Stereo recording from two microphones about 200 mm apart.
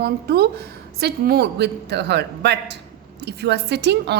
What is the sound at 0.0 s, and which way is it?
A woman's voice, 50° right (ahead or behind).